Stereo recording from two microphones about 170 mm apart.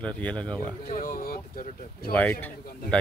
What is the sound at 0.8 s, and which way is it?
Speech, 55° left (ahead or behind).